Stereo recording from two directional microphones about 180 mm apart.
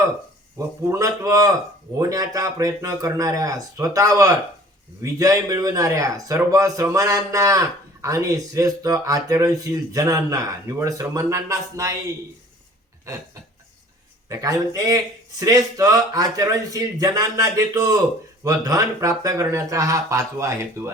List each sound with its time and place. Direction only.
0.9 s speech: 20° right (ahead or behind)
14.3 s speech: 20° right (ahead or behind)